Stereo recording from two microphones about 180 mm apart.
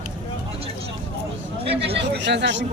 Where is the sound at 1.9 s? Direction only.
75° right (ahead or behind).